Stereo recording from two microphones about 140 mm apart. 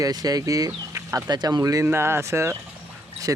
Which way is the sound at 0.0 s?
25° right (ahead or behind).